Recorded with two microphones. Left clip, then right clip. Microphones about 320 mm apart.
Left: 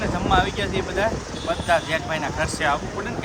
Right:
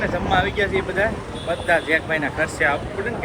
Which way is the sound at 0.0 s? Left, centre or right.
Left.